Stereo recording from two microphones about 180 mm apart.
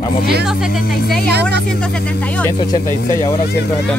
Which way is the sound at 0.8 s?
60° left (ahead or behind).